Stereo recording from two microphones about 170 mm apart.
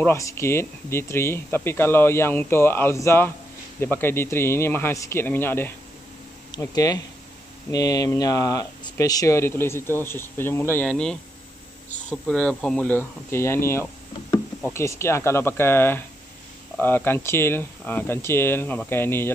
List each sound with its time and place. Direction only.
0.0 s speech: 15° left (ahead or behind)